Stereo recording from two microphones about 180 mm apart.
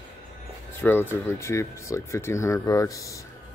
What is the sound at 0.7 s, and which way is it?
Speech, 10° left (ahead or behind).